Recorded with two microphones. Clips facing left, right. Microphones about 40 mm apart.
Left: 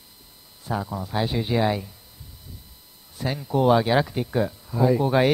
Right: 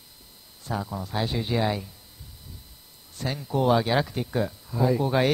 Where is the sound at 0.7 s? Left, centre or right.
Centre.